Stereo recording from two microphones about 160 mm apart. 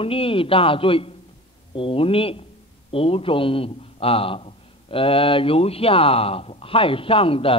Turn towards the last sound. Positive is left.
turn(degrees=35)  # may be behind; listen again after turning